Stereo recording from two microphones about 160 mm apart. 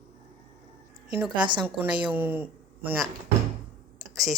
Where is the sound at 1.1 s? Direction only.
5° right (ahead or behind).